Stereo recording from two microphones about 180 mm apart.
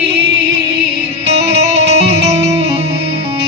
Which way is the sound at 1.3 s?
35° right (ahead or behind).